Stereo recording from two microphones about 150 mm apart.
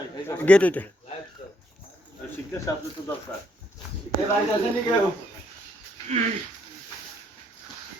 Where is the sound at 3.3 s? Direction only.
10° left (ahead or behind).